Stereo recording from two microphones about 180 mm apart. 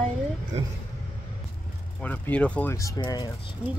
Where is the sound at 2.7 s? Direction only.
20° left (ahead or behind).